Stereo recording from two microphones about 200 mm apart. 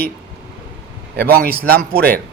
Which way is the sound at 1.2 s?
50° right (ahead or behind).